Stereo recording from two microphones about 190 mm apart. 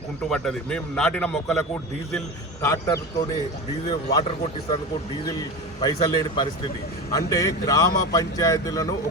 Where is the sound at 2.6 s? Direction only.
15° left (ahead or behind).